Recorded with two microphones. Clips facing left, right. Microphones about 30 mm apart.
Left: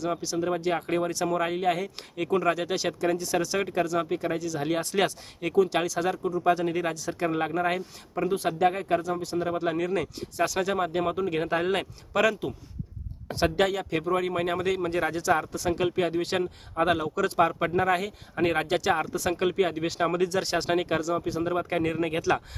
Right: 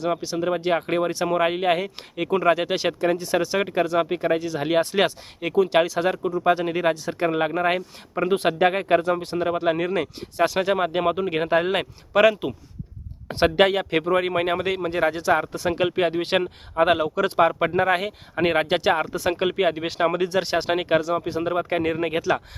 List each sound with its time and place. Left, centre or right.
0.0 s a man's voice: right
8.3 s a man's voice: right
22.2 s speech: centre